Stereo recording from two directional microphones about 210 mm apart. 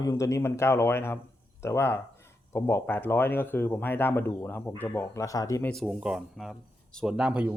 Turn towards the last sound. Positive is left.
turn(degrees=-5)  # may be behind; listen again after turning